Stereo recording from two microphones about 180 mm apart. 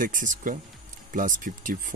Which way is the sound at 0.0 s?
45° right (ahead or behind).